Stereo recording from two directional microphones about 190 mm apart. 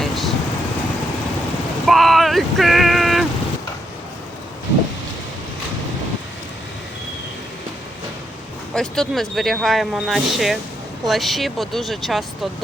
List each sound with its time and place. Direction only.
0.0 s vehicle: centre (ahead or behind)
1.9 s a sound: centre (ahead or behind)
8.7 s speech: centre (ahead or behind)